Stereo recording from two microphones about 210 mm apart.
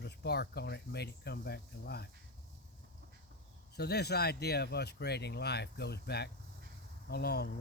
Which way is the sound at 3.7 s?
50° left (ahead or behind).